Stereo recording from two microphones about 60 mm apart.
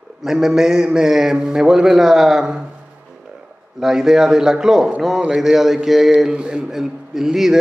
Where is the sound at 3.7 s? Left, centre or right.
Centre.